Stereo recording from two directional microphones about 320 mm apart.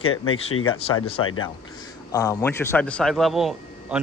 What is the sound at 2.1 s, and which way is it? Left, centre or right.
Speech, centre.